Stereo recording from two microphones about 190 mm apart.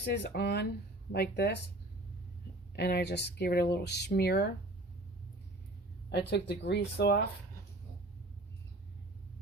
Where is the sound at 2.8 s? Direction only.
60° left (ahead or behind).